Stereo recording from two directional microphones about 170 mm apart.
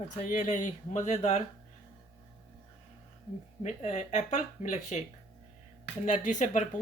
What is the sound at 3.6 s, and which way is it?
Speech, 45° left (ahead or behind).